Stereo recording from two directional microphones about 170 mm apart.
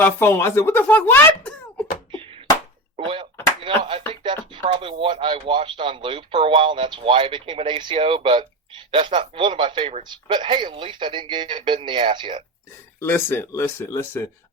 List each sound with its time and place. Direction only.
0.0 s a woman's voice: 15° left (ahead or behind)
2.9 s speech: 30° right (ahead or behind)
13.0 s a woman's voice: 15° left (ahead or behind)